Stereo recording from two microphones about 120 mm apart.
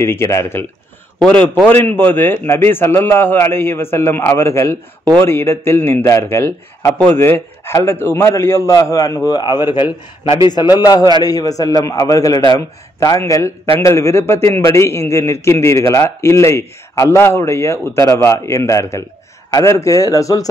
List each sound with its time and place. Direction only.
0.0 s a man's voice: 25° left (ahead or behind)